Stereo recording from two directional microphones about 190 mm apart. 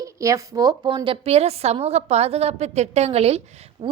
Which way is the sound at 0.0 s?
15° right (ahead or behind).